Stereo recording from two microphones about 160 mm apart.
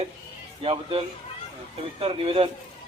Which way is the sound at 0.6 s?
35° right (ahead or behind).